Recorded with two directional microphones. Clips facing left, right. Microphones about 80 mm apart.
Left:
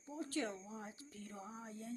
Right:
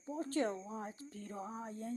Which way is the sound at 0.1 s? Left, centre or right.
Right.